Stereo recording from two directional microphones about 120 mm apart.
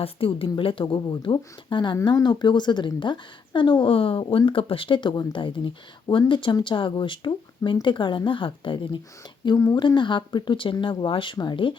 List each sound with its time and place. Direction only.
0.0 s a woman's voice: 50° left (ahead or behind)
9.6 s speech: 25° left (ahead or behind)
9.8 s a woman's voice: 40° left (ahead or behind)